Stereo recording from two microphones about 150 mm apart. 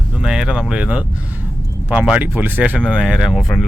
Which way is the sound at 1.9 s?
10° right (ahead or behind).